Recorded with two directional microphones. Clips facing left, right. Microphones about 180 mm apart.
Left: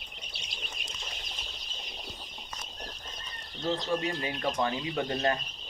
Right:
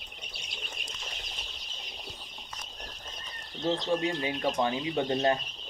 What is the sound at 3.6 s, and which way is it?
Speech, 20° right (ahead or behind).